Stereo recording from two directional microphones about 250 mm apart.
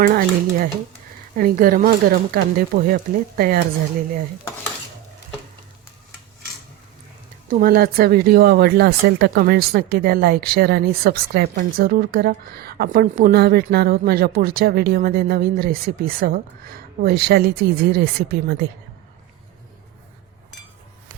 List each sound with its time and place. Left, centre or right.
0.0 s speech: right
7.5 s speech: right